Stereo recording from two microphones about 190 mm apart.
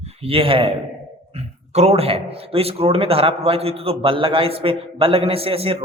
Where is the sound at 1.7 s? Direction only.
35° right (ahead or behind).